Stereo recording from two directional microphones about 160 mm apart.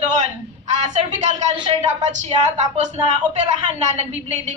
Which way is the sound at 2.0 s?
45° right (ahead or behind).